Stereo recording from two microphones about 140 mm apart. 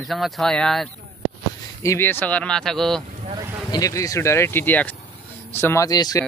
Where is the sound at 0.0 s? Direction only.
Centre (ahead or behind).